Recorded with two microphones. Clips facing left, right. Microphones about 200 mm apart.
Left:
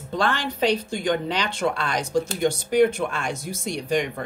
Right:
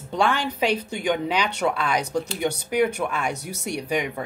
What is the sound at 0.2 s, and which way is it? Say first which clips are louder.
A woman's voice: right 1 dB; 10° right (ahead or behind).